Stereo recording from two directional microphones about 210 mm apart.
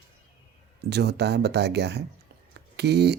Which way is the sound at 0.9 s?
50° right (ahead or behind).